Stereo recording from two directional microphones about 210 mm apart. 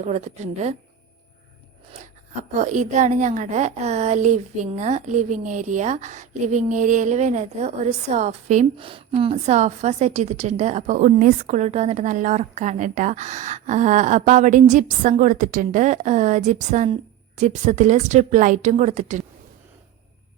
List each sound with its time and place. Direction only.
0.1 s a woman's voice: 35° right (ahead or behind)
2.6 s a woman's voice: 35° right (ahead or behind)